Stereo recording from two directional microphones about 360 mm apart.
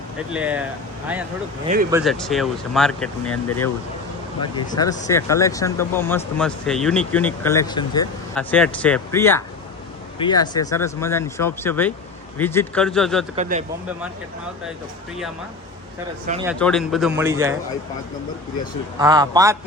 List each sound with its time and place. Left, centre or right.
0.3 s speech: centre
1.6 s speech: right
1.9 s speech: centre
4.4 s speech: centre
13.3 s speech: centre
16.5 s speech: centre
18.9 s a man's voice: centre